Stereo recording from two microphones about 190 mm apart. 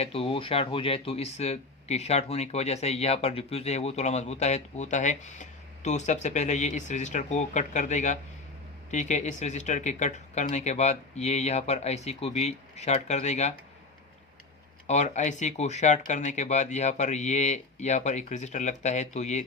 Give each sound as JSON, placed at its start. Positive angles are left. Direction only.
{"t": 0.0, "sound": "speech", "side_deg": 30}
{"t": 14.8, "sound": "speech", "side_deg": 40}